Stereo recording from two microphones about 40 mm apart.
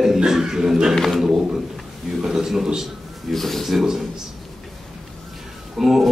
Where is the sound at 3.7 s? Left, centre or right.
Centre.